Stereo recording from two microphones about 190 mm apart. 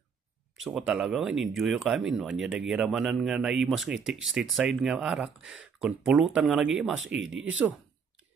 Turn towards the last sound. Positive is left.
turn(degrees=-5)  # may be behind; listen again after turning